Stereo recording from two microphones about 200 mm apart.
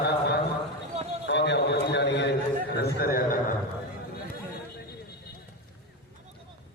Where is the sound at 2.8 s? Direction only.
50° left (ahead or behind).